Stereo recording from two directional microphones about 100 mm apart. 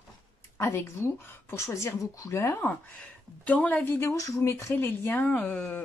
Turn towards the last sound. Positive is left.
turn(degrees=15)  # may be behind; listen again after turning